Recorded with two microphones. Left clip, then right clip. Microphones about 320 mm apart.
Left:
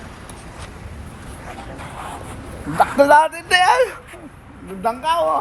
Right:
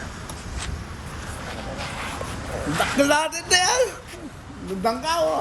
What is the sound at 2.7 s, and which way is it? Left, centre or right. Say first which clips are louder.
A man's voice: left 8 dB; centre.